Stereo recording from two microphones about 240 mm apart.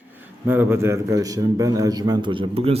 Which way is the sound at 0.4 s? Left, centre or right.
Centre.